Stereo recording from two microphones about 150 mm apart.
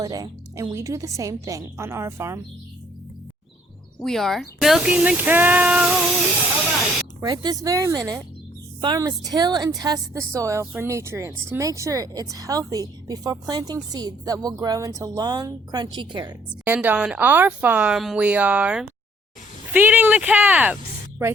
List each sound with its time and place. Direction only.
0.0 s a woman's voice: 25° right (ahead or behind)
4.0 s speech: centre (ahead or behind)
7.2 s a woman's voice: 25° right (ahead or behind)
16.6 s speech: 10° right (ahead or behind)